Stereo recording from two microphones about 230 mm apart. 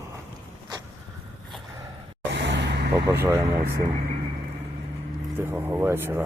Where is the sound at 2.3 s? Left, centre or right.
Right.